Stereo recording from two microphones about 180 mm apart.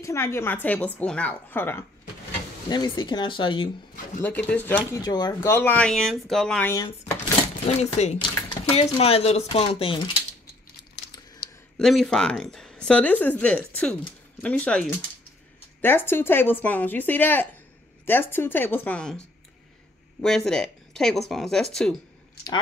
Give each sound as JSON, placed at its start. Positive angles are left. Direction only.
{"t": 0.0, "sound": "speech", "side_deg": 15}
{"t": 2.7, "sound": "speech", "side_deg": 25}
{"t": 4.2, "sound": "speech", "side_deg": 10}
{"t": 7.6, "sound": "speech", "side_deg": 40}
{"t": 11.8, "sound": "speech", "side_deg": 0}